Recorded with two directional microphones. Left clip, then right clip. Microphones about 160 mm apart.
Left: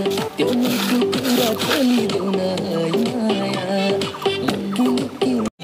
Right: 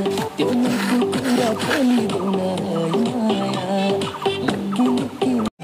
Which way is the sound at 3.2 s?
25° left (ahead or behind).